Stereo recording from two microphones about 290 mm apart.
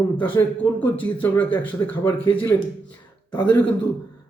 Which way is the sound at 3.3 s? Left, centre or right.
Centre.